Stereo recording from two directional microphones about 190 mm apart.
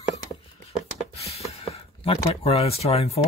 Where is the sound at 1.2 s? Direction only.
35° left (ahead or behind).